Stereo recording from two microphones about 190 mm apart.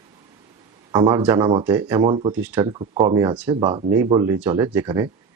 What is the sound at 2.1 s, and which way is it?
Speech, 25° right (ahead or behind).